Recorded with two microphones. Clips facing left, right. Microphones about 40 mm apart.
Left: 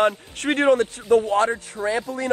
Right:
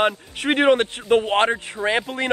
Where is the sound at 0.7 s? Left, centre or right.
Right.